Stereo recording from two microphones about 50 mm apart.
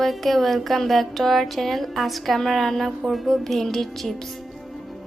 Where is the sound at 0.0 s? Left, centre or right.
Centre.